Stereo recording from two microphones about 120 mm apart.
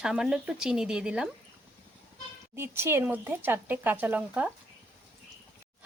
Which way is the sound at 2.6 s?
20° right (ahead or behind).